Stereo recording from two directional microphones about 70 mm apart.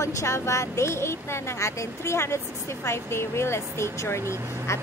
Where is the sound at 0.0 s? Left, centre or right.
Left.